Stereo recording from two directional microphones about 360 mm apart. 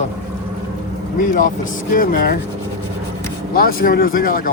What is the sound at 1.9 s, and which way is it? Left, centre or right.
Speech, left.